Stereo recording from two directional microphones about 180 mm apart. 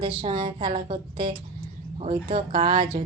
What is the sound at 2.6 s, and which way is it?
Speech, 30° right (ahead or behind).